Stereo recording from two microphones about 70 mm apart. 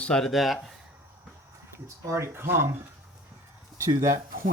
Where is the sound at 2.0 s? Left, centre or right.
Right.